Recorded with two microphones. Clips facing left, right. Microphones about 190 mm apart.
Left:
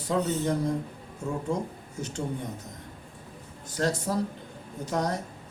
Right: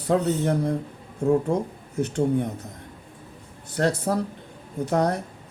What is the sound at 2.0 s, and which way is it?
Speech, 55° right (ahead or behind).